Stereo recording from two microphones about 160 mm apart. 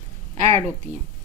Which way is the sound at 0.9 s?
10° right (ahead or behind).